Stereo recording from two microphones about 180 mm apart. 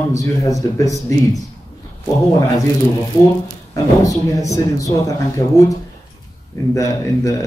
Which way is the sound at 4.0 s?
20° left (ahead or behind).